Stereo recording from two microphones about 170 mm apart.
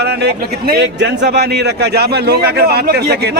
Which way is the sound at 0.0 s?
75° right (ahead or behind).